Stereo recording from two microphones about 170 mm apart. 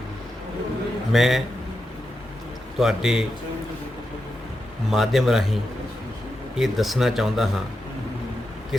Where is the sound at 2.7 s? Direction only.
5° right (ahead or behind).